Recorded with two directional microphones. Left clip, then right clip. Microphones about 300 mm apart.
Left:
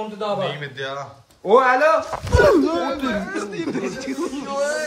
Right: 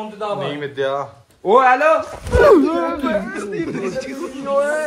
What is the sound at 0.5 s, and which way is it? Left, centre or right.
A man's voice, centre.